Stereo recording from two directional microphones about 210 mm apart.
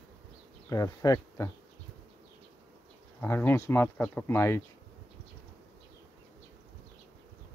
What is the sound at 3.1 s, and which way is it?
Speech, 10° left (ahead or behind).